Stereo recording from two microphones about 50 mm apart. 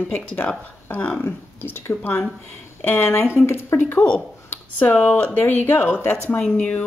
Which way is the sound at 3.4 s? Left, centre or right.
Left.